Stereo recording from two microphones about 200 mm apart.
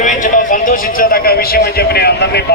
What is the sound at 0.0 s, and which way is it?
A man's voice, 40° left (ahead or behind).